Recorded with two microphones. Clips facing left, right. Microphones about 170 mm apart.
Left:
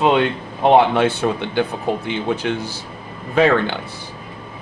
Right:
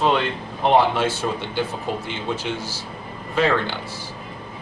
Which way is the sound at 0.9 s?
60° left (ahead or behind).